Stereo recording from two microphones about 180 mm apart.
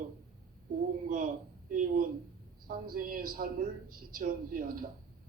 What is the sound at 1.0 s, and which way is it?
Speech, 50° right (ahead or behind).